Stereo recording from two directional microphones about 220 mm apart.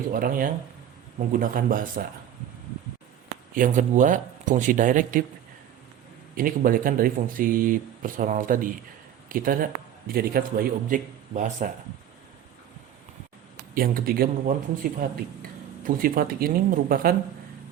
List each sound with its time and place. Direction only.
0.1 s speech: 40° right (ahead or behind)
3.5 s speech: 35° right (ahead or behind)
6.3 s speech: 40° right (ahead or behind)
13.7 s speech: 40° right (ahead or behind)
15.8 s speech: 40° right (ahead or behind)